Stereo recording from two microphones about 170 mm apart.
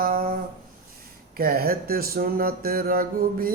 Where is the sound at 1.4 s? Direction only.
60° right (ahead or behind).